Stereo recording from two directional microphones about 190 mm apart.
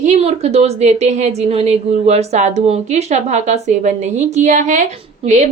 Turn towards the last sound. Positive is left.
turn(degrees=-35)  # may be behind; listen again after turning